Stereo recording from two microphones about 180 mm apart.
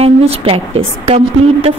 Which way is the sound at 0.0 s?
35° right (ahead or behind).